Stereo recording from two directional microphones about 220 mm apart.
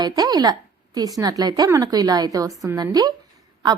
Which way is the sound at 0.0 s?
15° right (ahead or behind).